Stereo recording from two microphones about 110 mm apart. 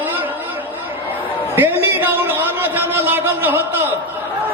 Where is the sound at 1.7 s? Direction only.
20° right (ahead or behind).